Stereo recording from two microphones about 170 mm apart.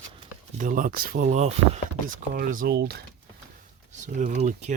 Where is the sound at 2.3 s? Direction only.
55° right (ahead or behind).